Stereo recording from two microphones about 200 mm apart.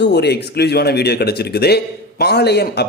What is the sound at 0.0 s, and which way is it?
Speech, 55° left (ahead or behind).